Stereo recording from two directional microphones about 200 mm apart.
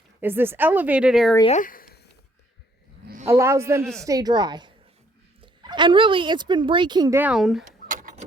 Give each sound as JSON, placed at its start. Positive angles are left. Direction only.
{"t": 0.2, "sound": "speech", "side_deg": -10}
{"t": 1.5, "sound": "speech", "side_deg": 40}
{"t": 3.2, "sound": "a woman's voice", "side_deg": -15}
{"t": 7.2, "sound": "speech", "side_deg": -5}
{"t": 7.9, "sound": "tick-tock", "side_deg": -40}